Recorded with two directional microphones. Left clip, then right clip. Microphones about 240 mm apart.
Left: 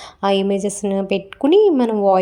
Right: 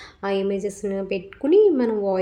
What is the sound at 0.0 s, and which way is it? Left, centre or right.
A woman's voice, left.